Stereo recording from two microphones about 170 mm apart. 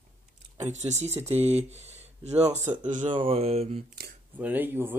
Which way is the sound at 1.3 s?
40° right (ahead or behind).